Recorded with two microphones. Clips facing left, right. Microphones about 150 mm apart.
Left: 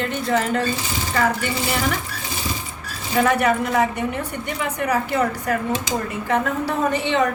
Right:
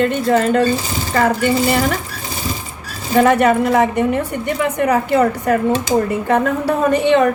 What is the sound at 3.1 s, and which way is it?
Speech, 55° right (ahead or behind).